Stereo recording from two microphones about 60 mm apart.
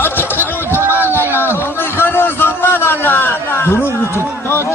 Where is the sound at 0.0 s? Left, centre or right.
Left.